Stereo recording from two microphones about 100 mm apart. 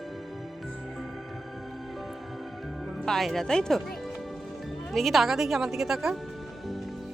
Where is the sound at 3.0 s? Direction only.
5° left (ahead or behind).